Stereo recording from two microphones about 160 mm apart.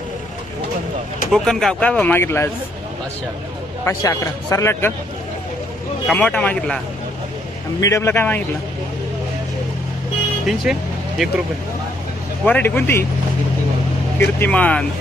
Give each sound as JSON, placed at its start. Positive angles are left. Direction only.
{"t": 1.3, "sound": "speech", "side_deg": 0}
{"t": 3.8, "sound": "a man's voice", "side_deg": 20}
{"t": 6.1, "sound": "speech", "side_deg": 5}
{"t": 7.8, "sound": "speech", "side_deg": 20}
{"t": 10.4, "sound": "speech", "side_deg": -5}
{"t": 12.5, "sound": "speech", "side_deg": 10}
{"t": 14.2, "sound": "speech", "side_deg": 10}